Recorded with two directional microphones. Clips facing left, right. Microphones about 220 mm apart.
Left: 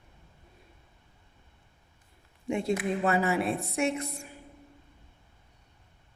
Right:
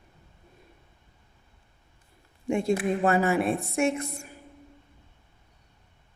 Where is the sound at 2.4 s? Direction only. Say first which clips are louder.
Right 4 dB; 45° right (ahead or behind).